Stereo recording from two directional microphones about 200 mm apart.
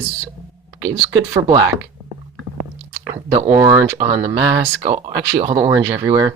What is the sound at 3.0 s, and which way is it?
Speech, 20° right (ahead or behind).